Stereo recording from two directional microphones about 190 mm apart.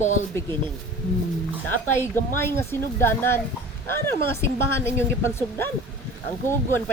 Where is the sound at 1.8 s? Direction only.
10° left (ahead or behind).